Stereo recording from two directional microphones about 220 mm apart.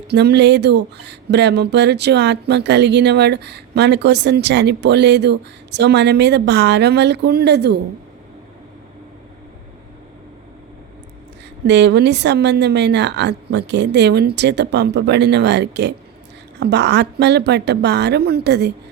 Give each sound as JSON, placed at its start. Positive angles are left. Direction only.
{"t": 0.1, "sound": "speech", "side_deg": -50}
{"t": 11.6, "sound": "speech", "side_deg": -50}